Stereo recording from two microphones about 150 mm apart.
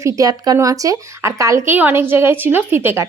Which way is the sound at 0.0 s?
20° right (ahead or behind).